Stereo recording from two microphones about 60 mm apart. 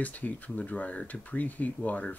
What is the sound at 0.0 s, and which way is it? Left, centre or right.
Speech, left.